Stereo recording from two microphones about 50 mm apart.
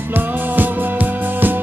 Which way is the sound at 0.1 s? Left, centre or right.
Right.